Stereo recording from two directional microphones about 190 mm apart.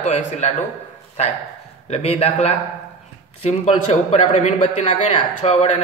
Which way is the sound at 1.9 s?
30° left (ahead or behind).